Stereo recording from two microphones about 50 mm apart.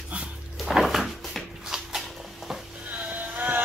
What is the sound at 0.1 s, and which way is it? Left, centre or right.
Cupboard open or close, right.